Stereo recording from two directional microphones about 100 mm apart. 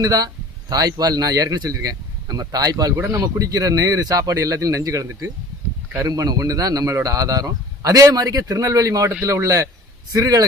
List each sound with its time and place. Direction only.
0.0 s a man's voice: 40° right (ahead or behind)
3.0 s speech: 20° right (ahead or behind)
3.2 s a man's voice: 40° right (ahead or behind)